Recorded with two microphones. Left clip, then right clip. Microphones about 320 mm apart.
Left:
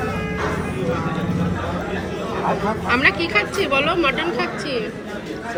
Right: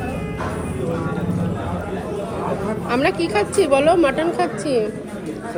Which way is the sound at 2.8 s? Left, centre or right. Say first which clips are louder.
Left 2 dB; centre.